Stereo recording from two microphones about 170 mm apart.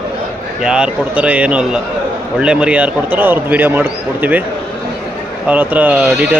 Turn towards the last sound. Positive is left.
turn(degrees=-10)  # may be behind; listen again after turning